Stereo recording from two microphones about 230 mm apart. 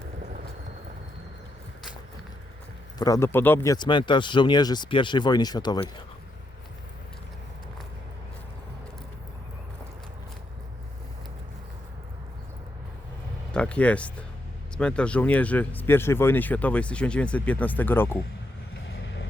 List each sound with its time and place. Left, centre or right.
3.0 s speech: centre
13.5 s speech: centre
18.9 s vehicle: left